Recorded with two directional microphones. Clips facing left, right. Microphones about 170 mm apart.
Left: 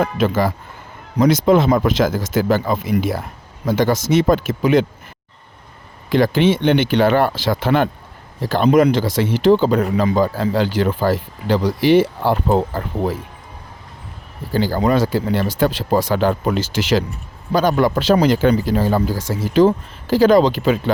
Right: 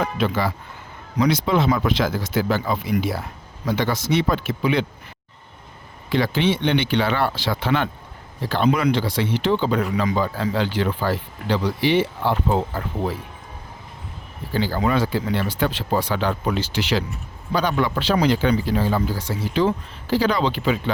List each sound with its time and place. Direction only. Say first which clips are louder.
0.0 s speech: left 5 dB; 45° left (ahead or behind)
6.1 s speech: left 5 dB; 45° left (ahead or behind)
14.5 s speech: left 4 dB; 40° left (ahead or behind)